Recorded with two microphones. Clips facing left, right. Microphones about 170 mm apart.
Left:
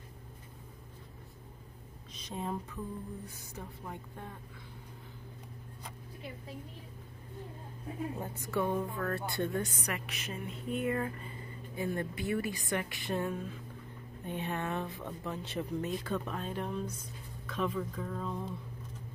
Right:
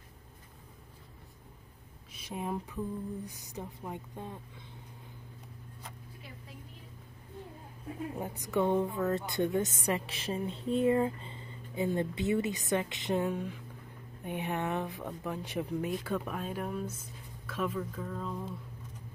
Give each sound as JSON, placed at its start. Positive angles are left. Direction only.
{"t": 2.1, "sound": "speech", "side_deg": -10}
{"t": 8.2, "sound": "a woman's voice", "side_deg": -15}